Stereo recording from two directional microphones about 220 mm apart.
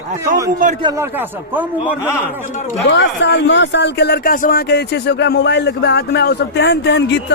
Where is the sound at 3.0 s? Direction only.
50° left (ahead or behind).